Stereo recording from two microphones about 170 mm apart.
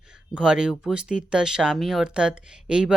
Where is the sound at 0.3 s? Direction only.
5° right (ahead or behind).